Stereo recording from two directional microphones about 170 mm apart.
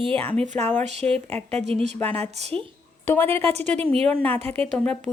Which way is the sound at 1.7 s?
35° right (ahead or behind).